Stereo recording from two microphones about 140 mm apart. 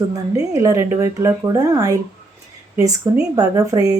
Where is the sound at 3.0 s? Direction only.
25° right (ahead or behind).